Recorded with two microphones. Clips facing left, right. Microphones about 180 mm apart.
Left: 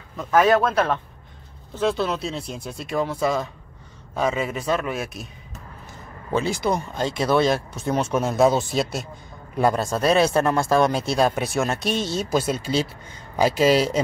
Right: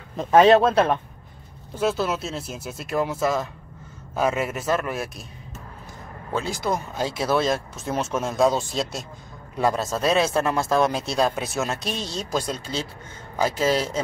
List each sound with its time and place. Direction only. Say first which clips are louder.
0.1 s speech: right 3 dB; 30° right (ahead or behind)
1.8 s speech: left 1 dB; 5° right (ahead or behind)
6.3 s a man's voice: left 3 dB; centre (ahead or behind)